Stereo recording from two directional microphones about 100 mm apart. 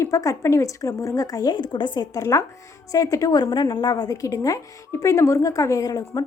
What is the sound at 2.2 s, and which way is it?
A woman's voice, 35° left (ahead or behind).